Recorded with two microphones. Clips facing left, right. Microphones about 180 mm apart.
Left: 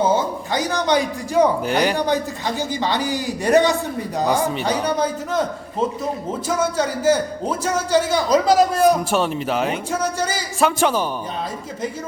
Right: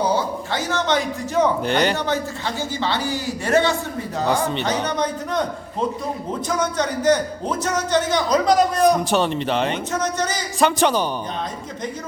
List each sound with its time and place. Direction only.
0.0 s a man's voice: 20° left (ahead or behind)
6.6 s speech: 10° left (ahead or behind)